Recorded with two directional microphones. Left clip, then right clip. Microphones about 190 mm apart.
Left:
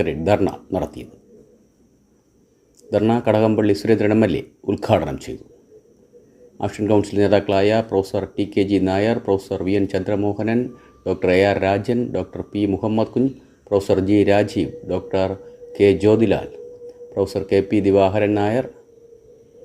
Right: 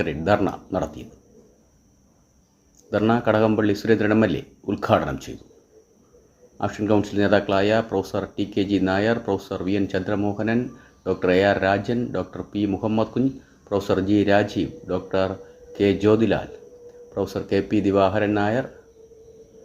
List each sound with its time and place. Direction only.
0.0 s speech: 20° left (ahead or behind)
3.1 s speech: 20° left (ahead or behind)
6.6 s speech: 20° left (ahead or behind)